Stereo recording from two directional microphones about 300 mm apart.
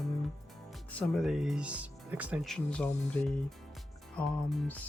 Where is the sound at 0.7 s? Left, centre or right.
Centre.